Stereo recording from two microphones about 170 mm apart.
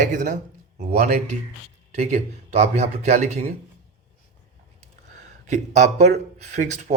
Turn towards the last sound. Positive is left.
turn(degrees=-45)  # may be behind; listen again after turning